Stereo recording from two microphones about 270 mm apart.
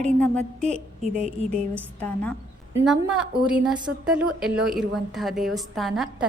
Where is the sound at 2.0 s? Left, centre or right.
Centre.